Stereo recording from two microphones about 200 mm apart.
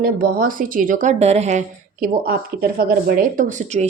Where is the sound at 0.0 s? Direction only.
45° right (ahead or behind).